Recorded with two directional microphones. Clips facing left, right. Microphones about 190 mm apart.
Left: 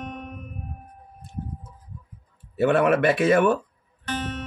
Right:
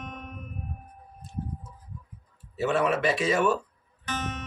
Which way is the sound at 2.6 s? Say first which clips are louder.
Left 6 dB; 55° left (ahead or behind).